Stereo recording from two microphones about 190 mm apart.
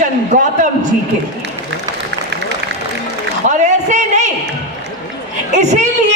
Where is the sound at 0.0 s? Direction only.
45° right (ahead or behind).